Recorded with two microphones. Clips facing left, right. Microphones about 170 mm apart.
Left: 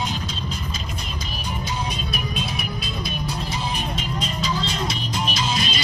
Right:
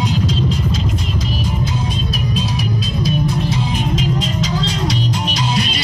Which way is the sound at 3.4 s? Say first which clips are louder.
Right 8 dB; 90° right.